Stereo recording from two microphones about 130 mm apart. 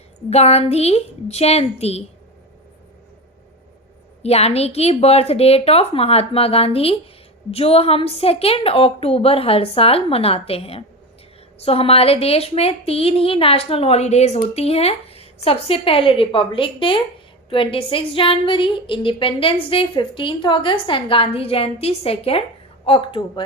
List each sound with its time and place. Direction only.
0.3 s a woman's voice: 55° left (ahead or behind)
4.2 s a woman's voice: 55° left (ahead or behind)